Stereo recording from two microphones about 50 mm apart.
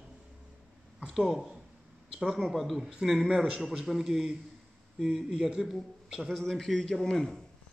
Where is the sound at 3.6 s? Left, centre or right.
Centre.